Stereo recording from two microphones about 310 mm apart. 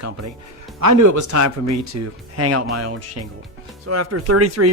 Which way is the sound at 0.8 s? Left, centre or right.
Right.